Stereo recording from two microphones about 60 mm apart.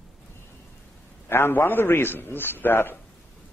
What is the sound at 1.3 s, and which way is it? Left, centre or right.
A man's voice, left.